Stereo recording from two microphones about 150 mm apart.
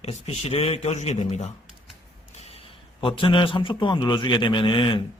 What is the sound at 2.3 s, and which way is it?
Creak, 45° left (ahead or behind).